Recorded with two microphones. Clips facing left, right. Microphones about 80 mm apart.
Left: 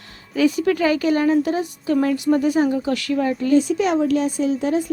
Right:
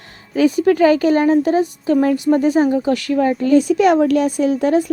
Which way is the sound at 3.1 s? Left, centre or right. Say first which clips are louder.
Right 3 dB; right.